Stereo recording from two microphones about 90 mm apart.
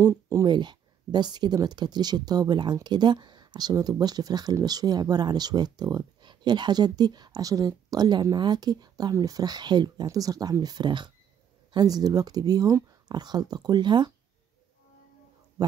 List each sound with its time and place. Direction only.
0.0 s speech: 40° right (ahead or behind)
0.5 s speech: 55° right (ahead or behind)
10.0 s speech: 40° right (ahead or behind); by 11.1 s 55° right (ahead or behind)
11.7 s speech: 45° right (ahead or behind)